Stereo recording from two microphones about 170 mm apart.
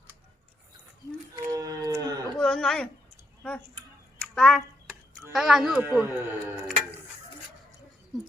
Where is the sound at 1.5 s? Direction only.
20° right (ahead or behind).